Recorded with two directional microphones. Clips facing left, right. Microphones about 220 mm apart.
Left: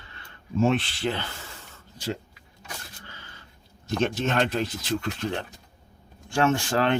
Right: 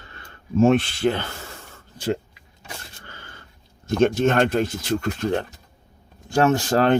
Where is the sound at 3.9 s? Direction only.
50° right (ahead or behind).